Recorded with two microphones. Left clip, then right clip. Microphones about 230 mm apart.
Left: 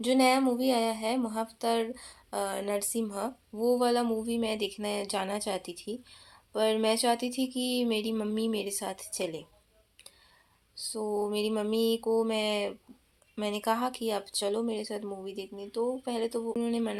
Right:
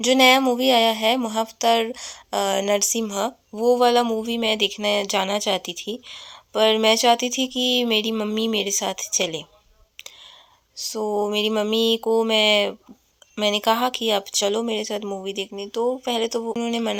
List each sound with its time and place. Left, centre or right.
0.0 s speech: right
10.9 s speech: right